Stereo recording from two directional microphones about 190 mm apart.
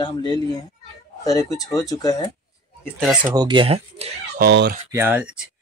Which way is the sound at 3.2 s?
20° right (ahead or behind).